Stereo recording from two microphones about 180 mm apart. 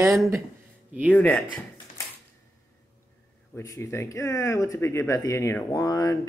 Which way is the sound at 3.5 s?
15° left (ahead or behind).